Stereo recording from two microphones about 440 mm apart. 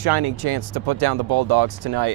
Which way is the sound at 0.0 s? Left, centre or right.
Right.